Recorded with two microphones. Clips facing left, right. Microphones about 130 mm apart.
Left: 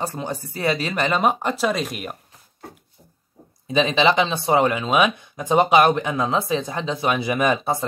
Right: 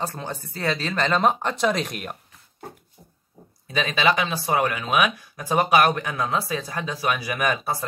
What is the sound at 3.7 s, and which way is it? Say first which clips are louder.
Speech: left 4 dB; 25° left (ahead or behind).